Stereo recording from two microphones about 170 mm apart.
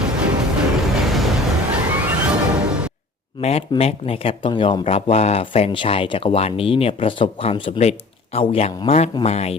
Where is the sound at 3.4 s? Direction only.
35° left (ahead or behind).